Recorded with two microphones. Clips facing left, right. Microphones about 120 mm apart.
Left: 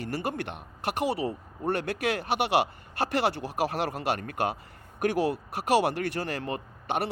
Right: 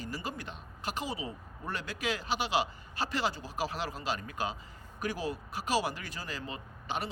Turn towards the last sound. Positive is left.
turn(degrees=60)  # may be behind; listen again after turning